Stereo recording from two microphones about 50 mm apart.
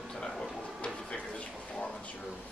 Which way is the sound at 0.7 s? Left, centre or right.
Left.